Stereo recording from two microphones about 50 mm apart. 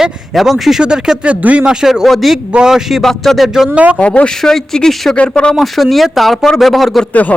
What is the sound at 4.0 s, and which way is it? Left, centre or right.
Speech, left.